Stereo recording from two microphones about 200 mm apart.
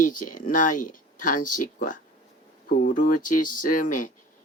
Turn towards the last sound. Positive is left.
turn(degrees=40)  # may be behind; listen again after turning